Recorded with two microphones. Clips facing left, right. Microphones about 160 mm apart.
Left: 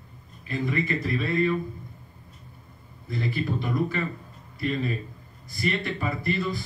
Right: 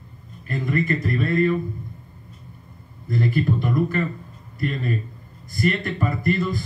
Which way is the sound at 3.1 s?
50° right (ahead or behind).